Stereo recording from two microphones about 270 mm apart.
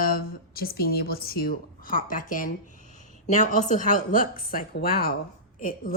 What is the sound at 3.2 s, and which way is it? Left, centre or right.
A woman's voice, left.